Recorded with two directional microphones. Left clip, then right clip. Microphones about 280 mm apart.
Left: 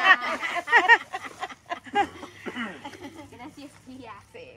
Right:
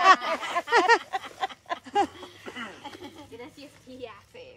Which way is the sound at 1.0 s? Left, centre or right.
Right.